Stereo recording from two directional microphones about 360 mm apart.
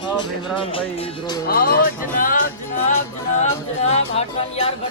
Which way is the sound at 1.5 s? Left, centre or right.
Left.